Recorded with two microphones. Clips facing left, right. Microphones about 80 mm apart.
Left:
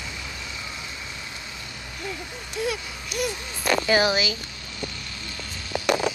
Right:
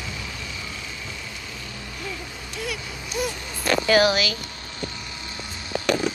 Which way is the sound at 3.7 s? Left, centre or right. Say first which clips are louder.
Right 2 dB; centre.